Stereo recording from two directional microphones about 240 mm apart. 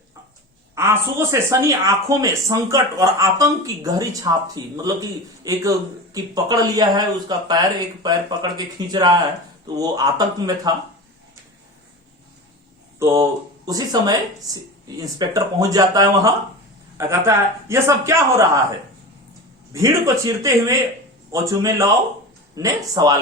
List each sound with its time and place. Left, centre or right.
0.8 s speech: centre
13.0 s speech: centre
19.7 s speech: centre